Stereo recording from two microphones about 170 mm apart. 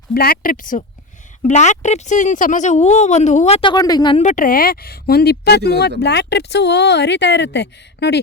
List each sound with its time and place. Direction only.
0.1 s speech: 65° left (ahead or behind); by 4.2 s 25° left (ahead or behind)
4.2 s speech: 45° left (ahead or behind); by 8.2 s 85° left